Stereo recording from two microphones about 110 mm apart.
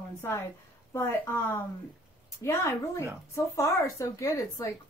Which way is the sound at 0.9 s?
20° left (ahead or behind).